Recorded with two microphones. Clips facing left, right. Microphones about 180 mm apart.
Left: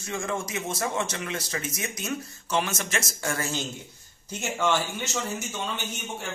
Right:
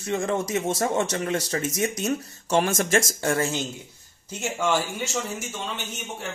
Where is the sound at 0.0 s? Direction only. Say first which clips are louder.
Right 5 dB; 35° right (ahead or behind).